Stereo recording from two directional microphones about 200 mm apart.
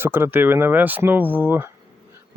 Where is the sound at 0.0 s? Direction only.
10° right (ahead or behind).